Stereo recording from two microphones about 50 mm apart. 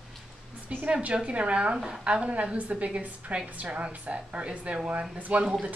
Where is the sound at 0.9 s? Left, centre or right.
Right.